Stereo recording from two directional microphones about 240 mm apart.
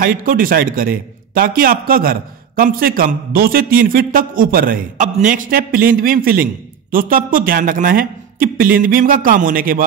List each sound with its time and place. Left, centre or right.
0.0 s a man's voice: right